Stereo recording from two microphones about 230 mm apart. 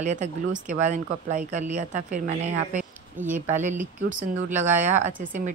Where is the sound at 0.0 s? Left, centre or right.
Right.